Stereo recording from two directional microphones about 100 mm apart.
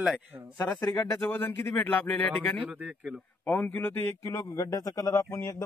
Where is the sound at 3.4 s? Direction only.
20° left (ahead or behind).